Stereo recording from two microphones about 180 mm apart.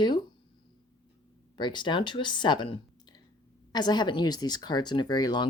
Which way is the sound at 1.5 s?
25° left (ahead or behind).